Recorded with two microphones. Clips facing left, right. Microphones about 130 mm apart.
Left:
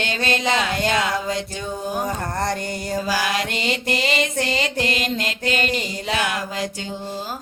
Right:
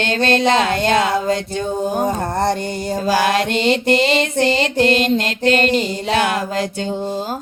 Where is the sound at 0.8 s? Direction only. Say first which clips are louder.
Right 6 dB; 45° right (ahead or behind).